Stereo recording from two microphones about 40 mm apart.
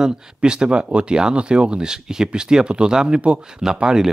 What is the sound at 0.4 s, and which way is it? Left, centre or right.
Speech, right.